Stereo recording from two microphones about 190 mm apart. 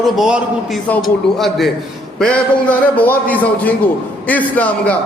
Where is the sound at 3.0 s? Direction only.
10° left (ahead or behind).